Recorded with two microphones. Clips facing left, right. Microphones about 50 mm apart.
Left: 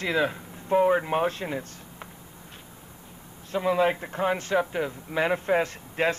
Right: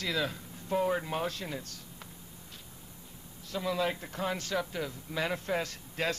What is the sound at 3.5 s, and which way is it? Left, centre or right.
Speech, left.